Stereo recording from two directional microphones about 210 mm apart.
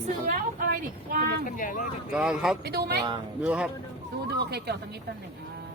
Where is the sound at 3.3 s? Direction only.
5° right (ahead or behind).